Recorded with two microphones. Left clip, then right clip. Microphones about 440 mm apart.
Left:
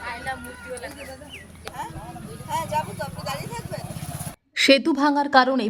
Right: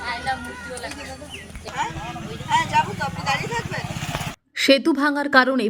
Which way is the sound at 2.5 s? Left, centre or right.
Left.